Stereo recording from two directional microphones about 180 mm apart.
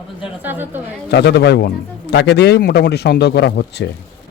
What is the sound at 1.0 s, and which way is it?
A man's voice, 65° left (ahead or behind).